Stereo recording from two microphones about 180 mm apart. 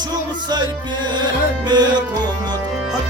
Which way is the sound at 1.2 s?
25° right (ahead or behind).